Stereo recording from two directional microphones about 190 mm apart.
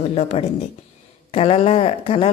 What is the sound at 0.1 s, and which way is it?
A woman's voice, 35° left (ahead or behind).